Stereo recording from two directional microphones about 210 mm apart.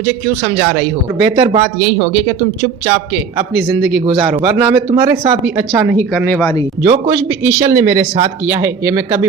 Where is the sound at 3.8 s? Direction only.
Centre (ahead or behind).